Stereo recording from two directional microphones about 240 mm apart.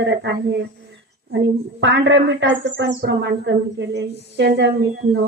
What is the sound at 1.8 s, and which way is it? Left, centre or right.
Child singing, right.